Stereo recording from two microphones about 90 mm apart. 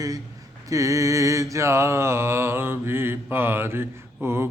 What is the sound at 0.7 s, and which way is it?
Mantra, 40° right (ahead or behind).